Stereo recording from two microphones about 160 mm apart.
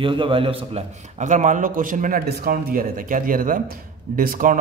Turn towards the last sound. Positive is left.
turn(degrees=-60)  # may be behind; listen again after turning